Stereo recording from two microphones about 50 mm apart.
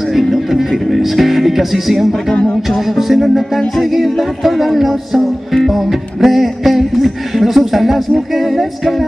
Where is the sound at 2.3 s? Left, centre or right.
Left.